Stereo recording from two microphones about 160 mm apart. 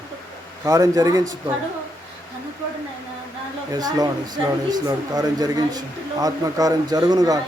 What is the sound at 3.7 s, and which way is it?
Speech, 25° right (ahead or behind).